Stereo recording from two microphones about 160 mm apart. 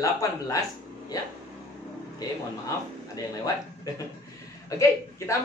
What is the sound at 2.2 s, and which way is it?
A man's voice, 20° left (ahead or behind).